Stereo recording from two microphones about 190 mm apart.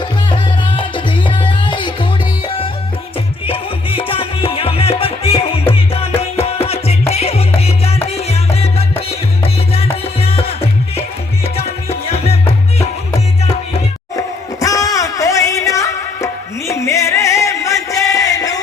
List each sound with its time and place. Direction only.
0.3 s music: 25° left (ahead or behind)
3.4 s music: 30° left (ahead or behind)
11.4 s music: 30° left (ahead or behind)
14.2 s music: 15° left (ahead or behind)